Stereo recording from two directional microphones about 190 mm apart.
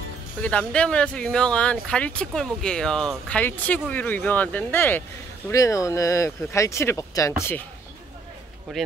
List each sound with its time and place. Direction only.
0.4 s speech: 5° left (ahead or behind)
8.7 s speech: centre (ahead or behind)